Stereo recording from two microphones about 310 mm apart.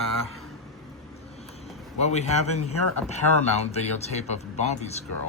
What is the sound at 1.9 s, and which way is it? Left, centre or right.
A man's voice, left.